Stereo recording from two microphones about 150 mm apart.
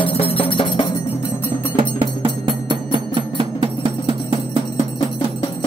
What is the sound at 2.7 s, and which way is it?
Music, 30° right (ahead or behind).